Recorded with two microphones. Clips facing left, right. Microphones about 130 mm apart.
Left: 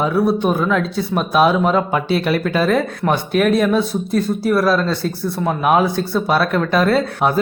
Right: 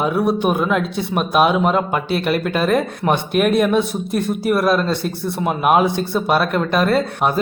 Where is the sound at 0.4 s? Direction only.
15° right (ahead or behind).